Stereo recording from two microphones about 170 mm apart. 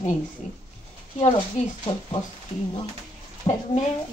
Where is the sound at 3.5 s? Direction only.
25° left (ahead or behind).